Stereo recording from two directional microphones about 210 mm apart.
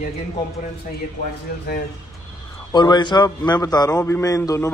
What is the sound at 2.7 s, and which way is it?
A man's voice, 20° left (ahead or behind).